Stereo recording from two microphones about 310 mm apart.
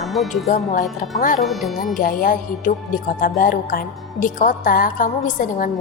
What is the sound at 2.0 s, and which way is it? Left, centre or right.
A woman's voice, left.